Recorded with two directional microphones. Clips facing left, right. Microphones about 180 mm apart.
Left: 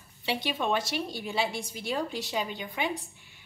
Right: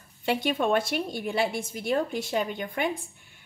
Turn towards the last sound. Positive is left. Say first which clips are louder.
# even
turn(degrees=-50)  # may be behind; listen again after turning